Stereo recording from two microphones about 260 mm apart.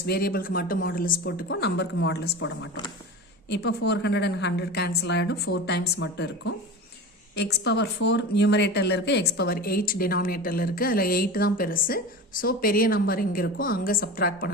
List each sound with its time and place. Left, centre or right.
0.0 s speech: left
3.7 s speech: left